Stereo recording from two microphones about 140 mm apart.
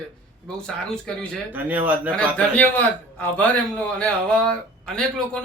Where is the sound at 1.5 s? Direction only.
10° right (ahead or behind).